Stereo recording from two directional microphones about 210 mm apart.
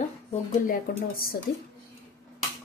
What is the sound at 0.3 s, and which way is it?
Speech, 35° left (ahead or behind).